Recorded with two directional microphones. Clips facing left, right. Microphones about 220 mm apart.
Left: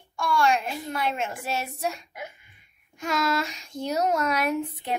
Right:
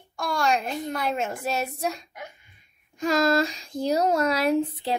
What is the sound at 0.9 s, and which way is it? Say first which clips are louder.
Speech: even; 40° right (ahead or behind).